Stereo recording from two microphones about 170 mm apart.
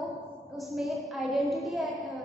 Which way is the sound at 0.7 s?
Centre (ahead or behind).